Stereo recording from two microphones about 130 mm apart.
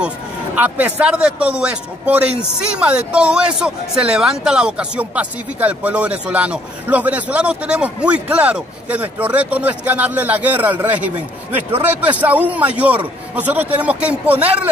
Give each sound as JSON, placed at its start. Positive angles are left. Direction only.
{"t": 0.6, "sound": "speech", "side_deg": -10}